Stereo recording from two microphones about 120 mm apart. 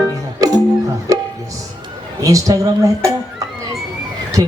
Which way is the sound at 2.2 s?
30° right (ahead or behind).